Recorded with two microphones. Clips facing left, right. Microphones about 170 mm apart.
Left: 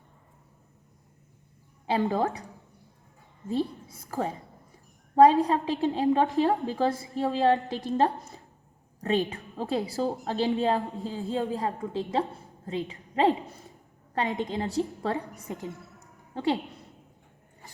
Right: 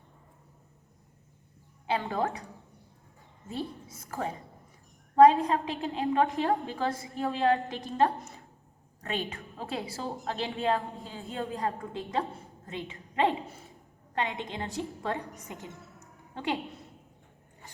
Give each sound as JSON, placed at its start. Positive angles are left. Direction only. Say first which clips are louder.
{"t": 1.9, "sound": "a woman's voice", "louder": "left 4 dB", "side_deg": 35}
{"t": 3.5, "sound": "a woman's voice", "louder": "left 7 dB", "side_deg": 35}